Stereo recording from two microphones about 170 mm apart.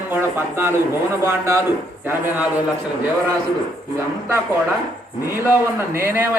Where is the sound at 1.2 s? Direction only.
15° right (ahead or behind).